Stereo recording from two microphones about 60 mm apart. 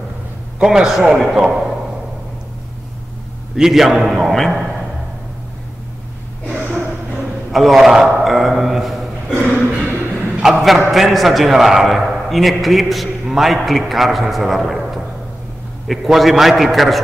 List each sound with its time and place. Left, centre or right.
0.6 s a man's voice: centre
3.5 s a man's voice: centre
7.5 s a man's voice: centre
8.2 s a sound: centre
9.8 s music: right
10.4 s a man's voice: centre